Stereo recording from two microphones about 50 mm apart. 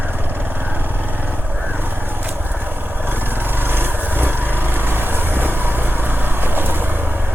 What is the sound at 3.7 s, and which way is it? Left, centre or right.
Vehicle, right.